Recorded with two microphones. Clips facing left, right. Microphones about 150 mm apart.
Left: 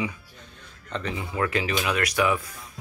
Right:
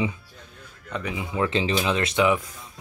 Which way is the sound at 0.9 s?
10° right (ahead or behind).